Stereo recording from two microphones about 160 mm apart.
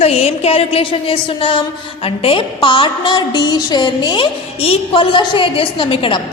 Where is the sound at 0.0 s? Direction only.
40° left (ahead or behind).